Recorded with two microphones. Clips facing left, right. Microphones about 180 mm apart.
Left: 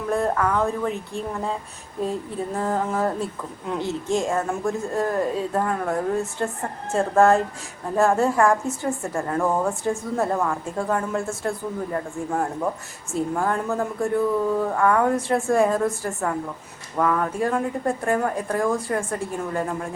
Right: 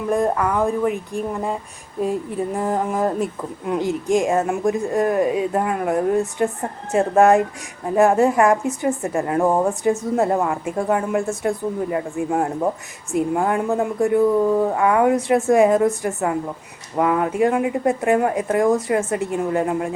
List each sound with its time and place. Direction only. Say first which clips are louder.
0.1 s speech: right 2 dB; 15° right (ahead or behind)